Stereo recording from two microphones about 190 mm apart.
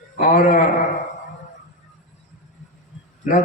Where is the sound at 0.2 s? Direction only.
45° left (ahead or behind).